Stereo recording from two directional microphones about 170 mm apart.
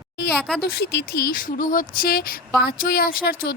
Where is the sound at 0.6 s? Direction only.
75° left (ahead or behind).